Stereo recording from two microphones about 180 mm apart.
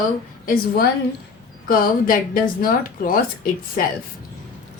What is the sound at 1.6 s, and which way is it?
Speech, 55° left (ahead or behind).